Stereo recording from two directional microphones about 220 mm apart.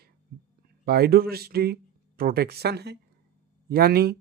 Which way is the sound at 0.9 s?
45° right (ahead or behind).